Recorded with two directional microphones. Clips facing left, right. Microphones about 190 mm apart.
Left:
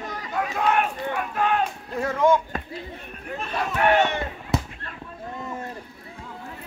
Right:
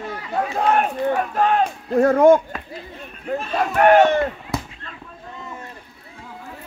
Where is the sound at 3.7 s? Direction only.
45° right (ahead or behind).